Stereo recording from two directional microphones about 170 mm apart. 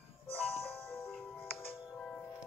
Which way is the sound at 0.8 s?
15° left (ahead or behind).